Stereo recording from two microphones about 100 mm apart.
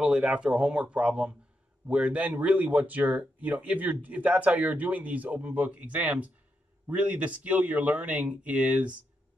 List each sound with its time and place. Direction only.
0.0 s speech: 10° right (ahead or behind)